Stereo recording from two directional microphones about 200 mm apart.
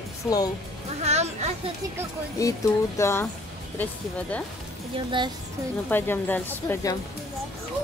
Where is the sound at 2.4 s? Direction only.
15° left (ahead or behind).